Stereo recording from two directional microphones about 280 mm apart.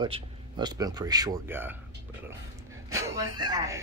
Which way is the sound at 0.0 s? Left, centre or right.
Centre.